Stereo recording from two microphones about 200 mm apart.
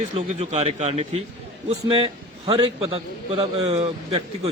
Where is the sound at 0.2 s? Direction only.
30° right (ahead or behind).